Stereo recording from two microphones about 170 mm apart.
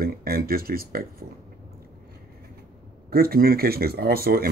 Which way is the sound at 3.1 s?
60° right (ahead or behind).